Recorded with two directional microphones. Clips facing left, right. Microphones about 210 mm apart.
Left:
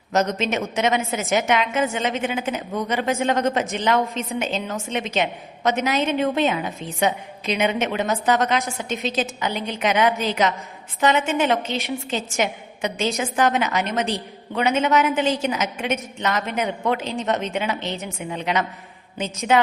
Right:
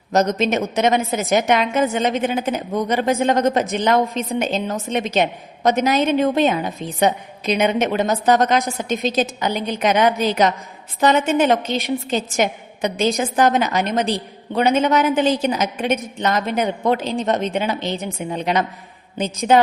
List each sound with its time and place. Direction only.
0.1 s a woman's voice: 40° right (ahead or behind)